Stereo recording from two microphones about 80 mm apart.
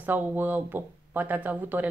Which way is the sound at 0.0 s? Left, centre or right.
Right.